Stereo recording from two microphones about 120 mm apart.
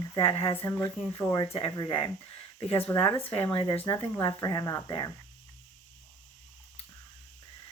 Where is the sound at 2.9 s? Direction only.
20° left (ahead or behind).